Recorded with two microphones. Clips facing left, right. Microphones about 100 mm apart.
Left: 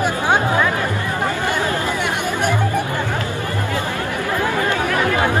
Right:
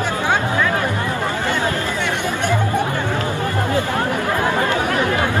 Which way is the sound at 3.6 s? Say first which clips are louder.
Right 5 dB; 20° right (ahead or behind).